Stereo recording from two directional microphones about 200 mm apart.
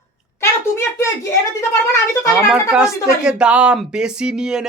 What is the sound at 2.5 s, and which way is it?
Speech, 5° right (ahead or behind).